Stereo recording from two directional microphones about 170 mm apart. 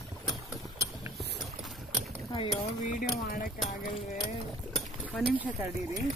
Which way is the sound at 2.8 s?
50° left (ahead or behind).